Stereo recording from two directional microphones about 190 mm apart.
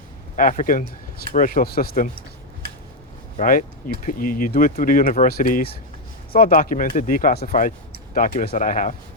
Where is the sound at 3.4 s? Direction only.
45° left (ahead or behind).